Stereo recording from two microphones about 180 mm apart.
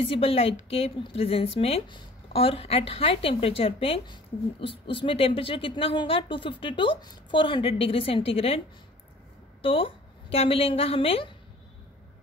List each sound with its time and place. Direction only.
0.0 s a woman's voice: 30° left (ahead or behind)
9.6 s a woman's voice: 30° left (ahead or behind)